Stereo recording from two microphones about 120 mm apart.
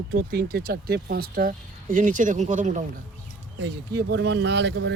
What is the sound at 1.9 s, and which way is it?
Speech, 90° right.